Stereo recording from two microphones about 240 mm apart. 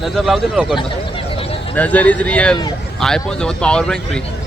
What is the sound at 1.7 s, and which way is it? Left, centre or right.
A man's voice, centre.